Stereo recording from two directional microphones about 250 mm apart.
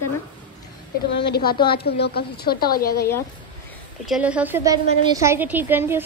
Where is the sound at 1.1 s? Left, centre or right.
Left.